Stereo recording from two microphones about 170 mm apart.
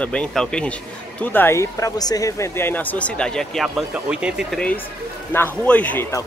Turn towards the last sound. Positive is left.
turn(degrees=15)  # may be behind; listen again after turning